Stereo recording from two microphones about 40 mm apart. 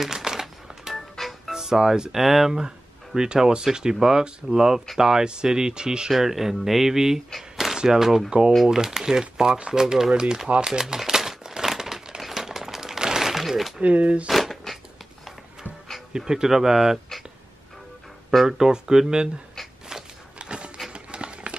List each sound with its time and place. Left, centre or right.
0.0 s music: centre
0.9 s music: centre
1.5 s speech: centre
6.1 s speech: centre
7.3 s a sound: centre
7.7 s speech: centre
8.3 s speech: right
10.6 s crumpling: centre
13.7 s speech: right
14.3 s a sound: centre
16.1 s speech: centre
18.3 s speech: centre
18.6 s speech: centre
19.9 s a sound: centre